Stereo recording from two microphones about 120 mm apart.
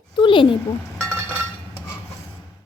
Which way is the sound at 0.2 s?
45° left (ahead or behind).